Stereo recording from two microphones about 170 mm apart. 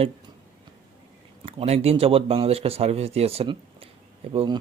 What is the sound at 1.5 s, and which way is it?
Speech, 35° right (ahead or behind).